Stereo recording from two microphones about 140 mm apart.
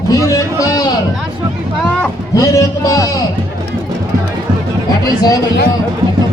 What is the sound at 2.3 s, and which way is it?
Speech, 25° left (ahead or behind).